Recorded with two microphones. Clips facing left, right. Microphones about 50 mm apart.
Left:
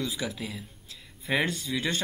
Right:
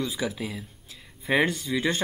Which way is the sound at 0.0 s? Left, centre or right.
Centre.